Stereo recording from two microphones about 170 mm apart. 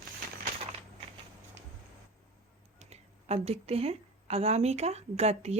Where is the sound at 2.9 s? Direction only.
40° right (ahead or behind).